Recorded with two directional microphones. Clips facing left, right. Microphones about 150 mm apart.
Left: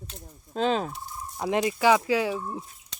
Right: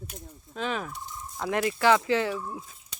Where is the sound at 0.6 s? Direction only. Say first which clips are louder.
Left 6 dB; 30° left (ahead or behind).